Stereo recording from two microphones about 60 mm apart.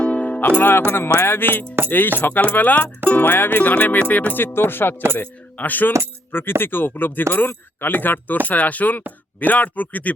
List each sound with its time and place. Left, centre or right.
0.0 s music: left
0.9 s speech: left